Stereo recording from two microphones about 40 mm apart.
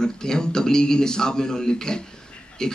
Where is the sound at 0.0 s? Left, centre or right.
Centre.